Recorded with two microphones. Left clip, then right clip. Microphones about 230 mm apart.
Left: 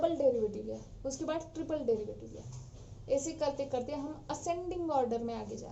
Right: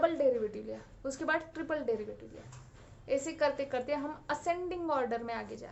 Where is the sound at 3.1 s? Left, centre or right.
Centre.